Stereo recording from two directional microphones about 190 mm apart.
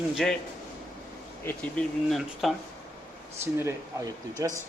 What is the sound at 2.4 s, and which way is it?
Speech, centre (ahead or behind).